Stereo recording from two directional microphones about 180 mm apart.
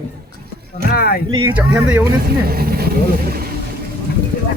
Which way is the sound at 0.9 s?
55° left (ahead or behind).